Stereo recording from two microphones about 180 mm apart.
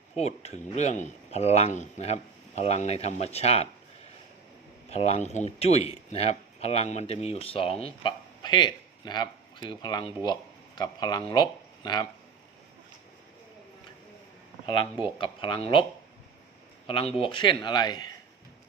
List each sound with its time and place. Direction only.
0.2 s speech: 35° left (ahead or behind)
4.9 s a man's voice: 35° left (ahead or behind)
15.0 s a man's voice: 30° left (ahead or behind)